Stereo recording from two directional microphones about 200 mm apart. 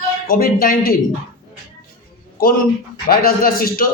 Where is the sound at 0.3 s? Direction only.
45° left (ahead or behind).